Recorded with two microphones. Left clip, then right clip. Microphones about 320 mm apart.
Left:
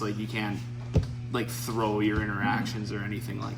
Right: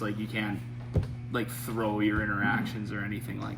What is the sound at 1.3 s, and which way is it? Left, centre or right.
A man's voice, centre.